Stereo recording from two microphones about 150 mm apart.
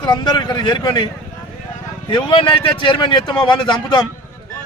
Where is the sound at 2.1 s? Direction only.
35° left (ahead or behind).